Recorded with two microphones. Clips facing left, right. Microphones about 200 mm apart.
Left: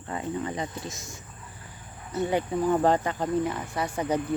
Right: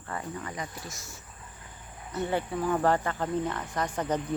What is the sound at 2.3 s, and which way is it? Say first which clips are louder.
A woman's voice: left 4 dB; 15° left (ahead or behind).